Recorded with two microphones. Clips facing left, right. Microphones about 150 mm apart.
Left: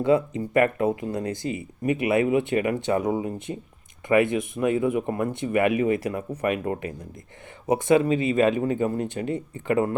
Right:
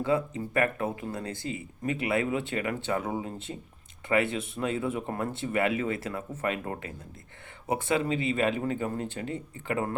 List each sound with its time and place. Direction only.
0.0 s speech: 20° left (ahead or behind)
7.7 s speech: 20° left (ahead or behind)